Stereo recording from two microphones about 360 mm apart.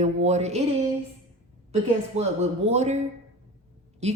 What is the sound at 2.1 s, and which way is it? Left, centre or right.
A woman's voice, centre.